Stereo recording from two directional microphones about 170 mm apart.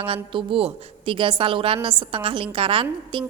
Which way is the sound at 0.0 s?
35° right (ahead or behind).